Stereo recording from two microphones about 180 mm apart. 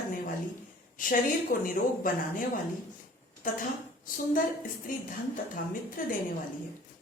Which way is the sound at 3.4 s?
50° left (ahead or behind).